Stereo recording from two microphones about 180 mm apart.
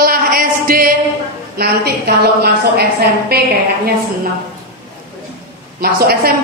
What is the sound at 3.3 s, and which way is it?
Speech, 60° right (ahead or behind).